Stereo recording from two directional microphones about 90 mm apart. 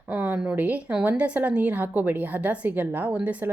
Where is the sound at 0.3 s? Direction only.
15° right (ahead or behind).